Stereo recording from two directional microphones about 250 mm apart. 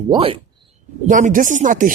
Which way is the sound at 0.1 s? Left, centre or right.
Right.